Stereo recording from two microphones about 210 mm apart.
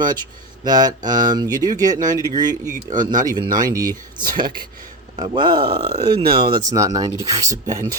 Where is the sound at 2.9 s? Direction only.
40° right (ahead or behind).